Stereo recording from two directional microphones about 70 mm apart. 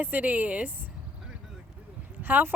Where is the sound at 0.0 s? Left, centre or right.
Right.